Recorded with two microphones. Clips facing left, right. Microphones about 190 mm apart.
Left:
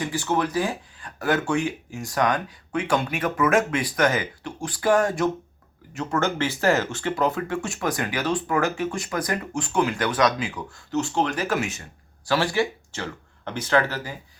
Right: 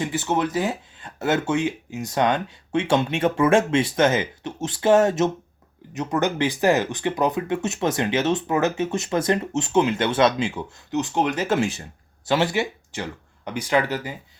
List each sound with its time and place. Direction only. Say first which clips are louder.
0.0 s speech: right 1 dB; 20° right (ahead or behind)